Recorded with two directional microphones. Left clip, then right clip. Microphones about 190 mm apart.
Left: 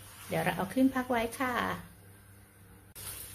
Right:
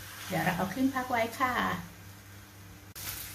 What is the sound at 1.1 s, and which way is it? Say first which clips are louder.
Speech: right 2 dB; 45° left (ahead or behind).